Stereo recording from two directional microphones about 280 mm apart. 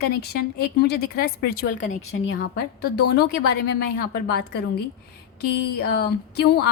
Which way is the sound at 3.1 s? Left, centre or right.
Left.